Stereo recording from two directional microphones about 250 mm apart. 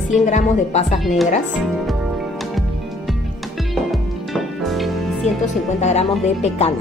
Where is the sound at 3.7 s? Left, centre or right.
Centre.